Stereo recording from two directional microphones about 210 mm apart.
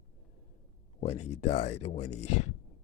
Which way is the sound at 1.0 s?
30° left (ahead or behind).